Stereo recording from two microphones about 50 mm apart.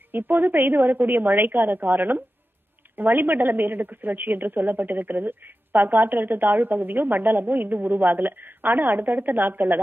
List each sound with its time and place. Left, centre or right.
0.1 s a woman's voice: right